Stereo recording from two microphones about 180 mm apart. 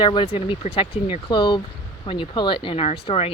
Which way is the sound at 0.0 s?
25° left (ahead or behind).